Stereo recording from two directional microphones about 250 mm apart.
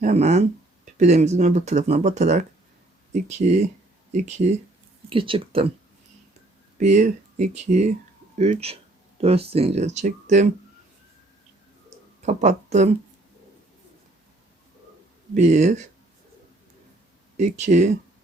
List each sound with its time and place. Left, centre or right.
0.0 s speech: right
6.7 s speech: right
11.9 s a sound: right
15.4 s speech: right
17.3 s speech: right